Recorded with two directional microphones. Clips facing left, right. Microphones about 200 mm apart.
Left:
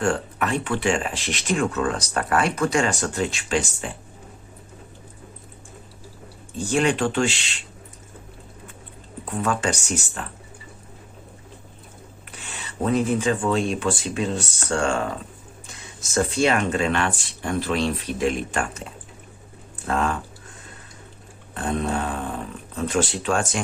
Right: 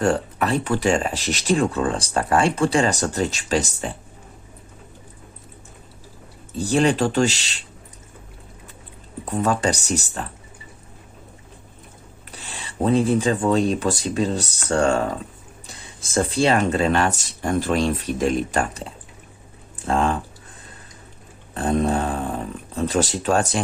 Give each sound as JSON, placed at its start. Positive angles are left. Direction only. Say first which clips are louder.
{"t": 0.0, "sound": "speech", "louder": "right 3 dB", "side_deg": -35}
{"t": 6.5, "sound": "speech", "louder": "right 3 dB", "side_deg": -35}
{"t": 9.2, "sound": "speech", "louder": "right 3 dB", "side_deg": -35}
{"t": 12.4, "sound": "speech", "louder": "right 3 dB", "side_deg": -35}
{"t": 21.5, "sound": "speech", "louder": "right 4 dB", "side_deg": -35}